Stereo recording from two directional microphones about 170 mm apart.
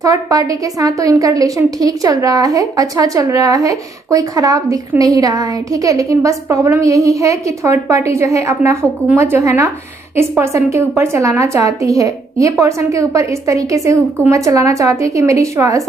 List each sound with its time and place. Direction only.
0.0 s a woman's voice: 20° right (ahead or behind)